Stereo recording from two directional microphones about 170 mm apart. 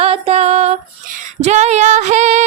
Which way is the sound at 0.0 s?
35° right (ahead or behind).